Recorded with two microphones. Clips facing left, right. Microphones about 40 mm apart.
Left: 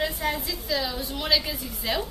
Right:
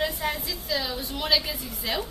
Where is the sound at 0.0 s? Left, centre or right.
Centre.